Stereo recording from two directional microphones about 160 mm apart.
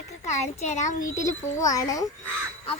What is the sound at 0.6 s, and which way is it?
Speech, 50° left (ahead or behind).